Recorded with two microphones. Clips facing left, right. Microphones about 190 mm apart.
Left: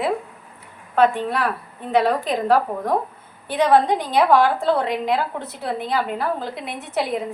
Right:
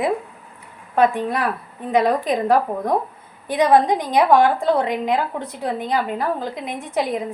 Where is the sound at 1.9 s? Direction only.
10° right (ahead or behind).